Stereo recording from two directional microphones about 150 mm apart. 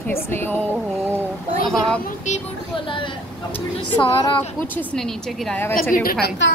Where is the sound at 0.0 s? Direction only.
15° left (ahead or behind).